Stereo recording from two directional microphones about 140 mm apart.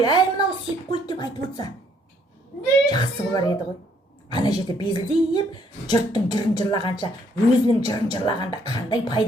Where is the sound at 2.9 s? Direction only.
30° left (ahead or behind).